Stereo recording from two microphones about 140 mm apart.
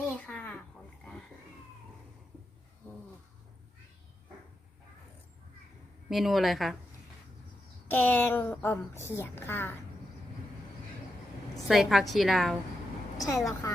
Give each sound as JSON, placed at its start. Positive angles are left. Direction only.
{"t": 0.2, "sound": "a sound", "side_deg": 10}
{"t": 6.1, "sound": "a woman's voice", "side_deg": 0}
{"t": 7.9, "sound": "a woman's voice", "side_deg": 15}
{"t": 11.7, "sound": "a woman's voice", "side_deg": 0}
{"t": 13.1, "sound": "a woman's voice", "side_deg": 25}